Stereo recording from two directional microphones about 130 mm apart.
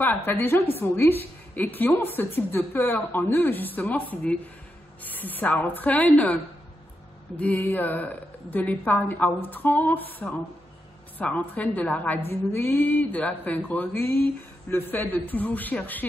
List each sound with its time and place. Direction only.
0.0 s a woman's voice: 15° left (ahead or behind)